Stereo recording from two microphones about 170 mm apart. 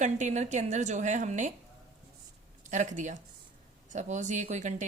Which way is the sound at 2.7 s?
45° right (ahead or behind).